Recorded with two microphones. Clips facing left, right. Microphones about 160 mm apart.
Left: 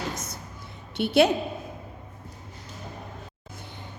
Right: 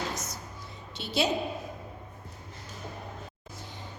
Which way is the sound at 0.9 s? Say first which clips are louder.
Left 9 dB; 60° left (ahead or behind).